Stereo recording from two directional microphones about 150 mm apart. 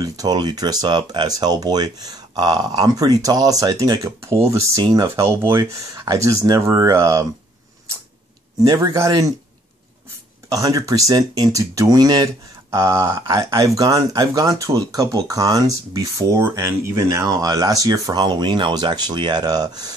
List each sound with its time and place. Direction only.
0.0 s speech: 25° right (ahead or behind)
8.5 s speech: 25° right (ahead or behind)
10.5 s speech: 25° right (ahead or behind)